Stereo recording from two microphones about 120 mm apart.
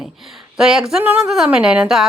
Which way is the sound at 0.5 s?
5° right (ahead or behind).